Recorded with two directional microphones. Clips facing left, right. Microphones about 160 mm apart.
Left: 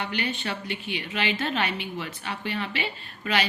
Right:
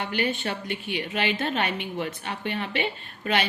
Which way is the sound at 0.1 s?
45° right (ahead or behind).